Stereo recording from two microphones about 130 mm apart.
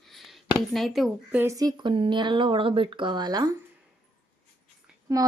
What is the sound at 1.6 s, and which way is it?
Speech, 30° right (ahead or behind).